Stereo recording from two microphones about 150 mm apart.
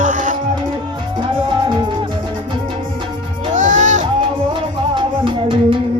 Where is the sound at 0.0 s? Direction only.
60° right (ahead or behind).